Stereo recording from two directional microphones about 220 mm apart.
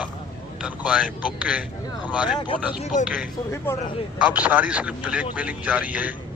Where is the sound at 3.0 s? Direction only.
5° right (ahead or behind).